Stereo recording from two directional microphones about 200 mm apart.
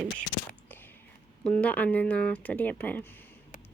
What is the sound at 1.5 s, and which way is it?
Speech, 5° left (ahead or behind).